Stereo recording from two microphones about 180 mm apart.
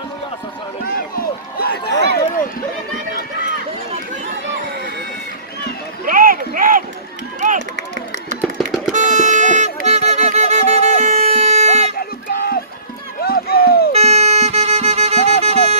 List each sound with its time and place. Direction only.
1.6 s a sound: 60° left (ahead or behind)
6.0 s a sound: 50° right (ahead or behind)
7.3 s run: 45° right (ahead or behind)
8.4 s music: centre (ahead or behind)
8.9 s music: 45° right (ahead or behind)
12.3 s music: 55° left (ahead or behind)
13.2 s run: 60° left (ahead or behind)
13.9 s music: 35° right (ahead or behind)